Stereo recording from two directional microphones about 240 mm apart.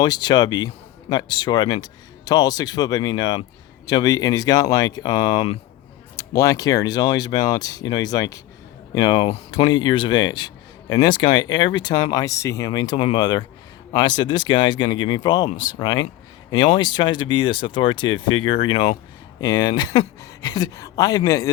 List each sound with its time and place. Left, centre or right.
0.0 s speech: centre